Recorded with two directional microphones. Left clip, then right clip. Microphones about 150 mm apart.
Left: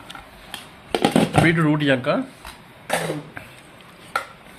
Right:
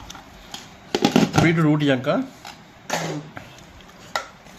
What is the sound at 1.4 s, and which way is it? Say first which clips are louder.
Speech: left 1 dB; 15° right (ahead or behind).